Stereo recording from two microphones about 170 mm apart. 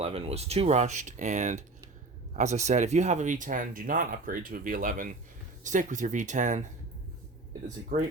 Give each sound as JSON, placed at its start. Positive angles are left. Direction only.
{"t": 0.0, "sound": "speech", "side_deg": -35}
{"t": 7.9, "sound": "speech", "side_deg": -65}